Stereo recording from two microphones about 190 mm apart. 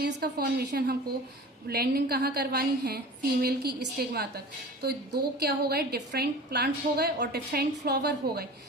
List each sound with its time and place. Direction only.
0.0 s a woman's voice: 60° right (ahead or behind)